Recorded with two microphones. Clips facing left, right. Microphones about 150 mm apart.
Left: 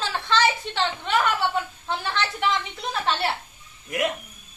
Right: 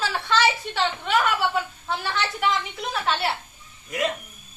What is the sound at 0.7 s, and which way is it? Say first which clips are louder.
Speech: even; 50° right (ahead or behind).